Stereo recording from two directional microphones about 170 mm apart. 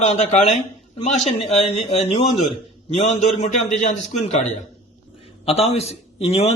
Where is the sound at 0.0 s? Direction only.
40° left (ahead or behind).